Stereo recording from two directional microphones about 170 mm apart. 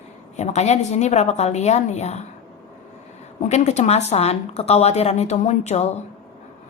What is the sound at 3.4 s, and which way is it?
A woman's voice, 40° left (ahead or behind).